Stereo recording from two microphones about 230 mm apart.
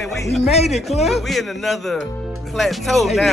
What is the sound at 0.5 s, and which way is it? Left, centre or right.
Speech, left.